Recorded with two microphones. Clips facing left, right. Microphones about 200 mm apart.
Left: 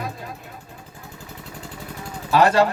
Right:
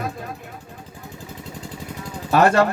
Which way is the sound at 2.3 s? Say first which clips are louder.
Right 1 dB; 50° right (ahead or behind).